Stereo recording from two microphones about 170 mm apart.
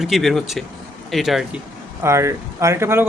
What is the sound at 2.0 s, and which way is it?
Speech, 15° right (ahead or behind).